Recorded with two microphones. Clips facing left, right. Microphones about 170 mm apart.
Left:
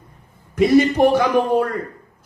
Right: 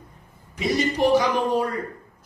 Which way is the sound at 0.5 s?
55° left (ahead or behind).